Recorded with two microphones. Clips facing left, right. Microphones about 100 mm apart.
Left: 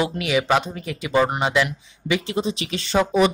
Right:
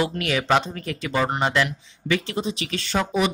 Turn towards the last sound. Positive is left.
turn(degrees=20)  # may be behind; listen again after turning